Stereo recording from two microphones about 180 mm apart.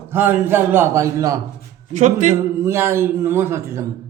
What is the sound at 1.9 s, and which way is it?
Speech, 45° right (ahead or behind).